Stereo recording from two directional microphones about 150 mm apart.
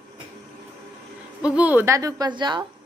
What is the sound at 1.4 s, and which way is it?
A woman's voice, 10° right (ahead or behind).